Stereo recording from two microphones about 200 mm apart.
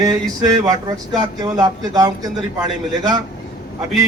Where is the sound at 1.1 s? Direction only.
20° right (ahead or behind).